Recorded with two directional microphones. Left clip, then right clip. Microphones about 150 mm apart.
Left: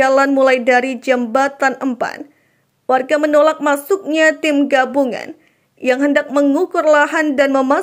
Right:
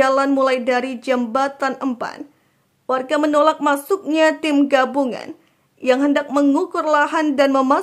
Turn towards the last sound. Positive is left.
turn(degrees=10)  # may be behind; listen again after turning